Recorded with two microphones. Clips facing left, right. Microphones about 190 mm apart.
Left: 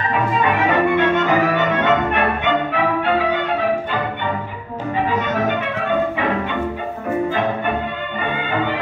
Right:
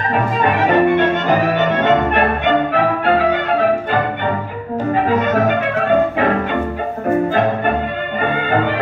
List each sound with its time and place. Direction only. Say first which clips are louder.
0.1 s music: right 2 dB; 45° right (ahead or behind)
5.0 s music: right 3 dB; 45° right (ahead or behind)